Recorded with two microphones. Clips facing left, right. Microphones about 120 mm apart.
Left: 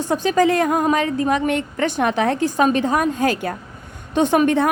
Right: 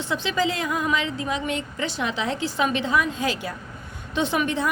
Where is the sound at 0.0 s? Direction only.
45° left (ahead or behind).